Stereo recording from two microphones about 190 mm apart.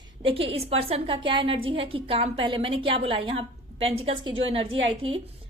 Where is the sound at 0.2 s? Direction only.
30° right (ahead or behind).